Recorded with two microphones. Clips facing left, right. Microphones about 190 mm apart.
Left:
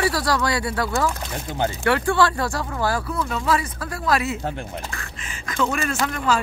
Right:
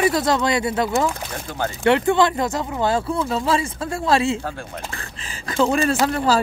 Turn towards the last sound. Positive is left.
turn(degrees=-30)  # may be behind; listen again after turning